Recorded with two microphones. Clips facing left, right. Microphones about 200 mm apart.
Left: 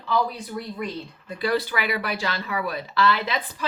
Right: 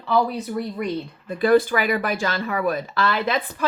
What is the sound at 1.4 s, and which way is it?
A woman's voice, 50° right (ahead or behind).